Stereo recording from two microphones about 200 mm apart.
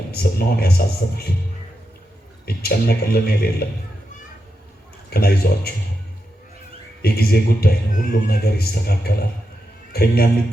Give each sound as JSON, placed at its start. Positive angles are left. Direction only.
{"t": 0.1, "sound": "speech", "side_deg": 50}
{"t": 2.6, "sound": "speech", "side_deg": 50}
{"t": 5.1, "sound": "speech", "side_deg": 50}
{"t": 7.0, "sound": "speech", "side_deg": 50}